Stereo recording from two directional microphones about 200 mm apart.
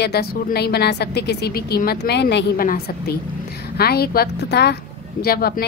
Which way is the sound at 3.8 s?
50° left (ahead or behind).